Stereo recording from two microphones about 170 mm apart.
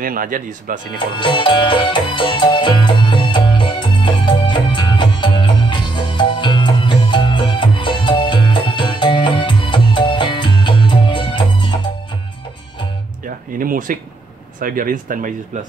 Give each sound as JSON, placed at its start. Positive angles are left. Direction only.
{"t": 0.0, "sound": "speech", "side_deg": -55}
{"t": 0.9, "sound": "music", "side_deg": 30}
{"t": 13.6, "sound": "speech", "side_deg": -55}